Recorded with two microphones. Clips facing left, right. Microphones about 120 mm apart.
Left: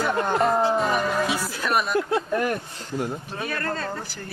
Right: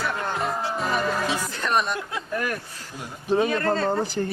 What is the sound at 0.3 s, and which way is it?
Music, centre (ahead or behind).